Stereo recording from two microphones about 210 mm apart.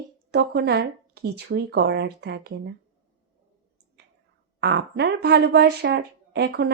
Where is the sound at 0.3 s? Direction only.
50° right (ahead or behind).